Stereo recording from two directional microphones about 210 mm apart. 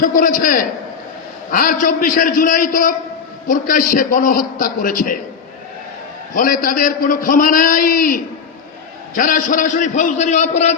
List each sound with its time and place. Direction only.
0.0 s a man's voice: 40° left (ahead or behind)
6.3 s a man's voice: 40° left (ahead or behind)